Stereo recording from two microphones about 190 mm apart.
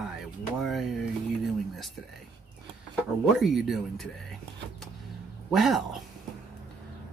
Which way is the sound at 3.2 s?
Centre (ahead or behind).